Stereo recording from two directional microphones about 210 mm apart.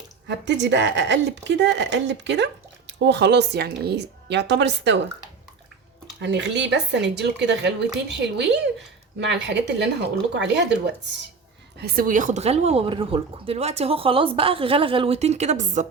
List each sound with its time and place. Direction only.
0.3 s speech: 55° right (ahead or behind)
6.1 s speech: 60° right (ahead or behind)
11.8 s speech: 45° right (ahead or behind)